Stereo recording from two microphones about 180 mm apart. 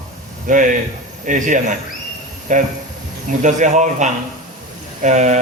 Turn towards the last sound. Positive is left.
turn(degrees=-40)  # may be behind; listen again after turning